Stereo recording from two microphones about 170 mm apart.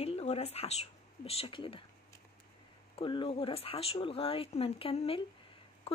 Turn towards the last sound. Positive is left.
turn(degrees=35)  # may be behind; listen again after turning